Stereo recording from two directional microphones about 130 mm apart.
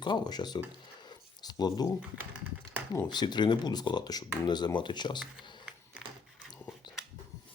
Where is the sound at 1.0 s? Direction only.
35° left (ahead or behind).